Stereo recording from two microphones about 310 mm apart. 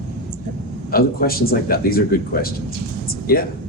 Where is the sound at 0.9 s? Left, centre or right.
Left.